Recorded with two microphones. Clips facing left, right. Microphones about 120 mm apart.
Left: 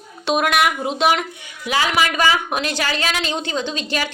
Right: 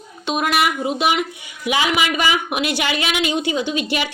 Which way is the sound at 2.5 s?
10° right (ahead or behind).